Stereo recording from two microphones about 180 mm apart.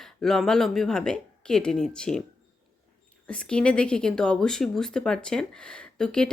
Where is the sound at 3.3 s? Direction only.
5° left (ahead or behind).